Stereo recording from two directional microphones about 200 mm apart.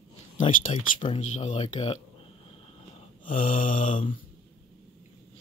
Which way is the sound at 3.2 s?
40° left (ahead or behind).